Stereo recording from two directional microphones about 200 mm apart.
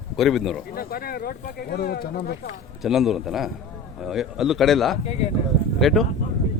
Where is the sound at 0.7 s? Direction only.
50° left (ahead or behind).